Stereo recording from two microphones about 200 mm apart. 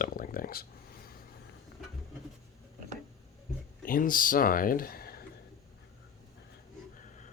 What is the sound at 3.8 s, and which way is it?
Speech, 45° left (ahead or behind).